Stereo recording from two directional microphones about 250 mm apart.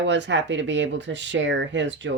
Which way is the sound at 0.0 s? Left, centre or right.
Right.